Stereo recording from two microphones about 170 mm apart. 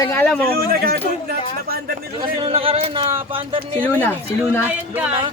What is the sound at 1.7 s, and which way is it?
Speech, 65° right (ahead or behind).